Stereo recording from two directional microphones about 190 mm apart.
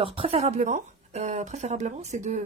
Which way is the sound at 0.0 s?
30° right (ahead or behind).